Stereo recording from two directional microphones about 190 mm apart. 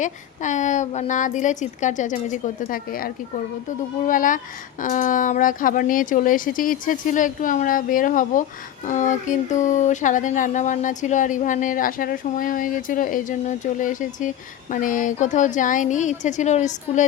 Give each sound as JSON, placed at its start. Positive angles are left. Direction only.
{"t": 0.0, "sound": "speech", "side_deg": 40}